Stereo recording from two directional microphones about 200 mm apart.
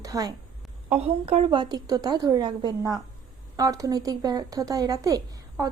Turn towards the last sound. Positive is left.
turn(degrees=-15)  # may be behind; listen again after turning